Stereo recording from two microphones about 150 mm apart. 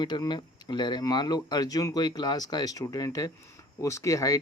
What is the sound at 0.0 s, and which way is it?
Speech, 30° left (ahead or behind).